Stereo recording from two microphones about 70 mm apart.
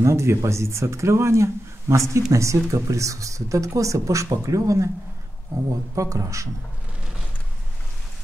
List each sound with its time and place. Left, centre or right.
0.0 s speech: right
5.9 s speech: right